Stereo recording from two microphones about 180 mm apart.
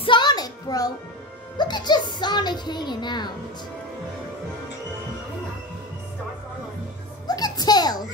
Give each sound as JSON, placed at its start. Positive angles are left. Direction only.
{"t": 0.0, "sound": "music", "side_deg": 25}
{"t": 1.6, "sound": "a child's voice", "side_deg": 25}
{"t": 7.2, "sound": "music", "side_deg": 20}